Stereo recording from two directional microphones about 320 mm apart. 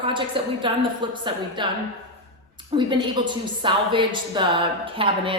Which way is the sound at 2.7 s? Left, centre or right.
Centre.